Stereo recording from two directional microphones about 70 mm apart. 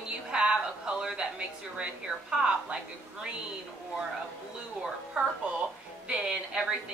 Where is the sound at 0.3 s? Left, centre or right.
Centre.